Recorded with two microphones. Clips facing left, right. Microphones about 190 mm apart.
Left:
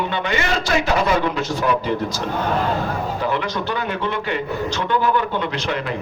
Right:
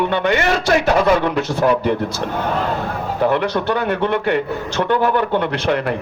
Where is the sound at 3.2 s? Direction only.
60° right (ahead or behind).